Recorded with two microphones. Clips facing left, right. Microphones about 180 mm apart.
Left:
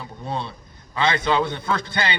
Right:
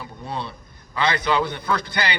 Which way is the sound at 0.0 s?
25° left (ahead or behind).